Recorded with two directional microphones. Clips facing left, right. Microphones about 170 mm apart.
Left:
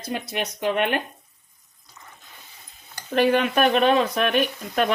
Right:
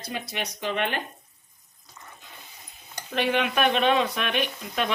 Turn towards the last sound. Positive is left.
turn(degrees=45)  # may be behind; listen again after turning